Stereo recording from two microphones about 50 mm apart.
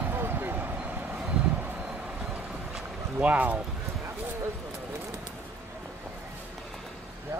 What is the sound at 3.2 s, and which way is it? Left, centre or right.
Speech, right.